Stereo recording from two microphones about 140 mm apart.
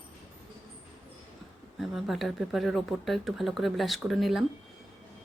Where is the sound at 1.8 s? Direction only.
Centre (ahead or behind).